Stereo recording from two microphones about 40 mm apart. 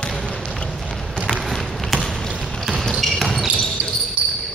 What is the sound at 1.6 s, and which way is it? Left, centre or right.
Basketball bounce, centre.